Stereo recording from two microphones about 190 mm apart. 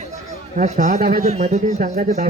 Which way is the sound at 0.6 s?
40° right (ahead or behind).